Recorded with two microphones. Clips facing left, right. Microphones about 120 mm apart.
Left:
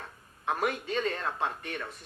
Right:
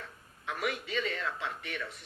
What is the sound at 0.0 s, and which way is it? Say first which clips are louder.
Speech: left 6 dB; 45° left (ahead or behind).